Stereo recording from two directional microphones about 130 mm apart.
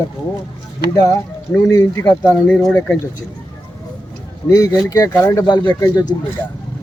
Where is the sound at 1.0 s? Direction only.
25° left (ahead or behind).